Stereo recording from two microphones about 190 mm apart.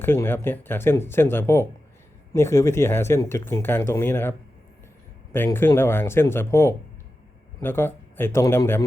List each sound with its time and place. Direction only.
0.0 s speech: 10° left (ahead or behind)